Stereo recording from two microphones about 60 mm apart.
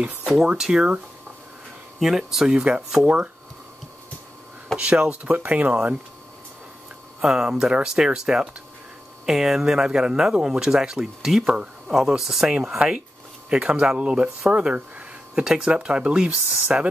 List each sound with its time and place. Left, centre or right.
0.2 s speech: centre
2.0 s speech: centre
4.7 s speech: centre
7.2 s speech: centre
11.9 s speech: centre
12.5 s speech: centre